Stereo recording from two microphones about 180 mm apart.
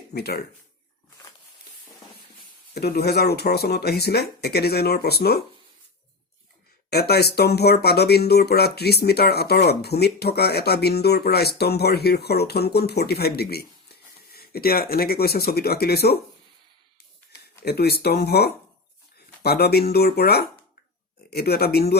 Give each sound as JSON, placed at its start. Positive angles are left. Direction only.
{"t": 0.1, "sound": "speech", "side_deg": 60}
{"t": 2.7, "sound": "speech", "side_deg": 60}
{"t": 6.9, "sound": "speech", "side_deg": 60}
{"t": 17.7, "sound": "speech", "side_deg": 60}